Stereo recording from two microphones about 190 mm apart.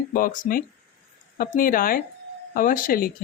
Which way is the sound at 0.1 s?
45° left (ahead or behind).